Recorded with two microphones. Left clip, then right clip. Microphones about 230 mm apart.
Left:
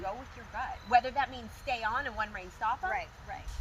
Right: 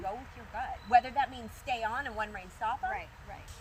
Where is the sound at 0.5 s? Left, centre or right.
Centre.